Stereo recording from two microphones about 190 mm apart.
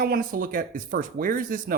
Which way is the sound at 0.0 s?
50° right (ahead or behind).